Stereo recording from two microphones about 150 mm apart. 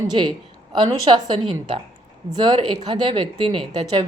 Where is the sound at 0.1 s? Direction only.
30° right (ahead or behind).